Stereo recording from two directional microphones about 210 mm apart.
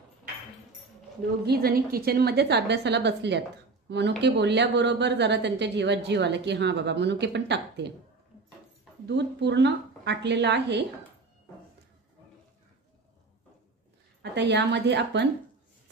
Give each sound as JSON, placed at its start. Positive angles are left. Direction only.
{"t": 1.4, "sound": "a woman's voice", "side_deg": -50}
{"t": 9.0, "sound": "a woman's voice", "side_deg": -55}
{"t": 14.5, "sound": "a woman's voice", "side_deg": -55}